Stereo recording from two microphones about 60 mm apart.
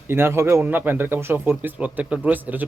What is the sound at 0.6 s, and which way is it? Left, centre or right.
Speech, right.